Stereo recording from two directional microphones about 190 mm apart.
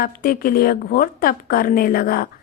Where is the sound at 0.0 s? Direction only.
50° left (ahead or behind).